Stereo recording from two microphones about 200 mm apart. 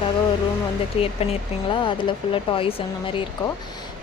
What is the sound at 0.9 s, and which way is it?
Speech, 30° left (ahead or behind).